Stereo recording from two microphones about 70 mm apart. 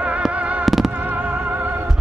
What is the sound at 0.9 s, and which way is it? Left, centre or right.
Music, right.